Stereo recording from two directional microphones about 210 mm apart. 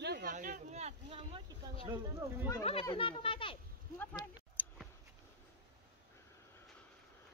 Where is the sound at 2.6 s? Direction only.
25° left (ahead or behind).